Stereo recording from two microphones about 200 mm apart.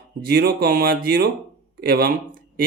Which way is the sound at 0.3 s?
50° right (ahead or behind).